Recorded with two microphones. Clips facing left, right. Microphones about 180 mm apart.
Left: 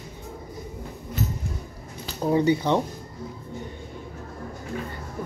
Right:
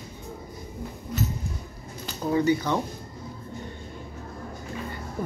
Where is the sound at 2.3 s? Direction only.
25° left (ahead or behind).